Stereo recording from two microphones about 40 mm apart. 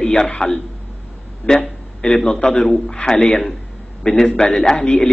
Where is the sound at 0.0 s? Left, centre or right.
Left.